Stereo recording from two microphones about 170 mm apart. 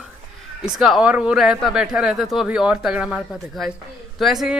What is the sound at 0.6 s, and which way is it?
Speech, centre (ahead or behind).